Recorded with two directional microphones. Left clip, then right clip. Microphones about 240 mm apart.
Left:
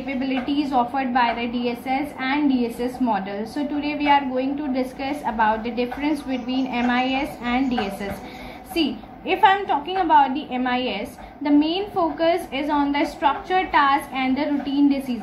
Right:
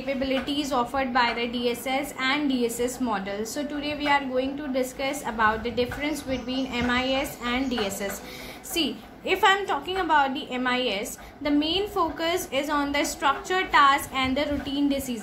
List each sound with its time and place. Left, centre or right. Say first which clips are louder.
0.6 s a woman's voice: left 7 dB; right
9.2 s a woman's voice: left 4 dB; right